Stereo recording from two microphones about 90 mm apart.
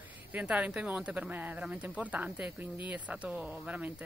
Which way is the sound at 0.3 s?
15° right (ahead or behind).